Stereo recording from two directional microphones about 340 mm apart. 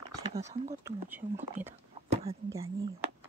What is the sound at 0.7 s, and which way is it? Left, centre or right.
Speech, centre.